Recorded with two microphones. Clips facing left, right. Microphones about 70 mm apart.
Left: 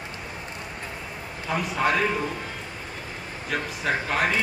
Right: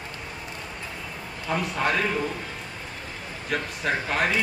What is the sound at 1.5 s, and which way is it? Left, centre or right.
Speech, centre.